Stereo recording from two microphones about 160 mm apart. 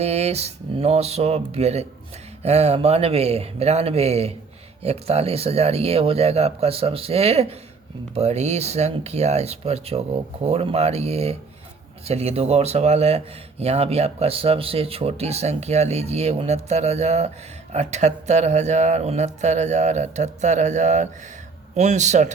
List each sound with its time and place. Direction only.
0.0 s speech: 40° right (ahead or behind)